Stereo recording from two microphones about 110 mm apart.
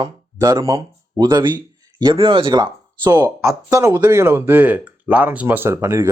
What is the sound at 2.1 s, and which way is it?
Speech, 50° right (ahead or behind).